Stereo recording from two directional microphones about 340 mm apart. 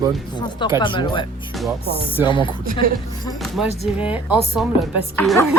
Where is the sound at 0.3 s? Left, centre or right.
Centre.